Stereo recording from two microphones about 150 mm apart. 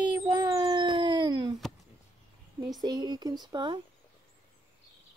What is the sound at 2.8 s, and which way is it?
Speech, 25° right (ahead or behind).